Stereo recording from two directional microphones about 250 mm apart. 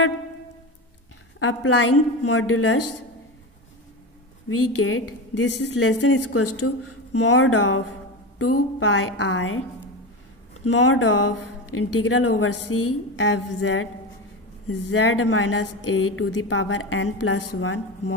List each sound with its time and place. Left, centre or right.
1.4 s a woman's voice: left
4.5 s a woman's voice: left
10.6 s speech: left